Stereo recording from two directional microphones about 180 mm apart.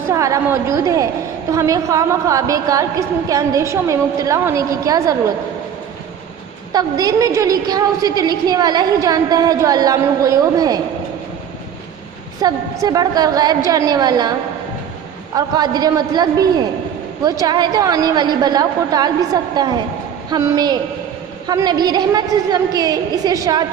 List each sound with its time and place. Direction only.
0.1 s a woman's voice: 15° right (ahead or behind)
6.7 s a woman's voice: 20° right (ahead or behind)
12.4 s a woman's voice: 20° right (ahead or behind)
15.4 s a woman's voice: 20° right (ahead or behind)